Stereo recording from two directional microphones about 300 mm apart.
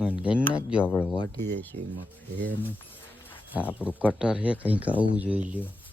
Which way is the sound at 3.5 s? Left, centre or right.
Centre.